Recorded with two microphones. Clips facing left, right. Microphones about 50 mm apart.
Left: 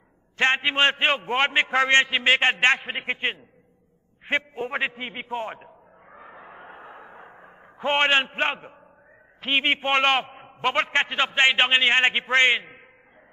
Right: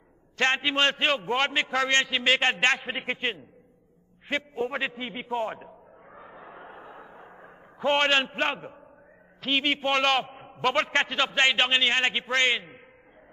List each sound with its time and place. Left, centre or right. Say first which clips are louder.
0.4 s a man's voice: left 3 dB; left
5.6 s a sound: right 2 dB; centre
9.4 s a man's voice: left 3 dB; left